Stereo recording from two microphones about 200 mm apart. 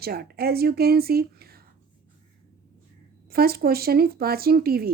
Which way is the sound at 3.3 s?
50° right (ahead or behind).